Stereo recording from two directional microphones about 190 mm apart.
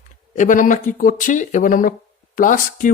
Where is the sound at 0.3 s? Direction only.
45° left (ahead or behind).